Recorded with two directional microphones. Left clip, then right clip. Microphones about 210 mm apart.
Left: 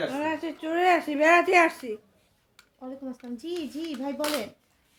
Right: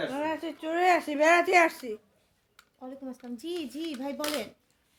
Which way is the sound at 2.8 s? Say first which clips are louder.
Left 3 dB; 40° right (ahead or behind).